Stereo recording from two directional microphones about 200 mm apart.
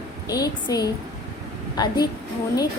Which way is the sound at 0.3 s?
20° left (ahead or behind).